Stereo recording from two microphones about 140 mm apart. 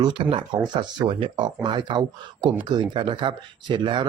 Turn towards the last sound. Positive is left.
turn(degrees=-35)  # may be behind; listen again after turning